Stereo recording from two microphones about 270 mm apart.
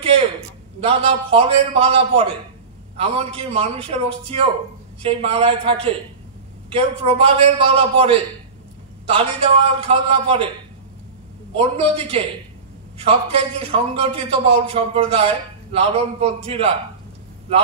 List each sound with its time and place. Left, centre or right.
0.7 s a man's voice: right
11.5 s a man's voice: right